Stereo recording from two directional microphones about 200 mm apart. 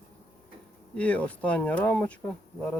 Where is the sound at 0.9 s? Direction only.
5° left (ahead or behind).